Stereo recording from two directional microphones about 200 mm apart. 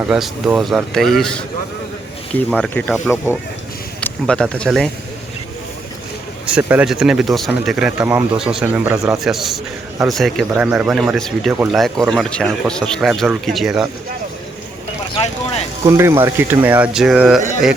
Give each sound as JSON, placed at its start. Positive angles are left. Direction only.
{"t": 0.0, "sound": "speech", "side_deg": -5}
{"t": 2.5, "sound": "speech", "side_deg": 5}
{"t": 4.3, "sound": "speech", "side_deg": 5}
{"t": 6.5, "sound": "speech", "side_deg": -10}
{"t": 11.8, "sound": "speech", "side_deg": 0}
{"t": 15.1, "sound": "vehicle", "side_deg": 30}
{"t": 15.9, "sound": "speech", "side_deg": -10}